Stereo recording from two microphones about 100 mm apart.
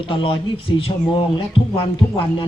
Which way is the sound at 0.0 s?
60° left (ahead or behind).